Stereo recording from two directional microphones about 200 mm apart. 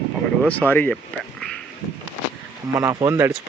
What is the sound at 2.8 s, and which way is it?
Speech, 15° right (ahead or behind).